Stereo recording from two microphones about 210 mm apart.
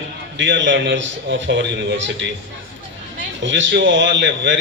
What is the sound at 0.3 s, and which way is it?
A man's voice, 60° right (ahead or behind).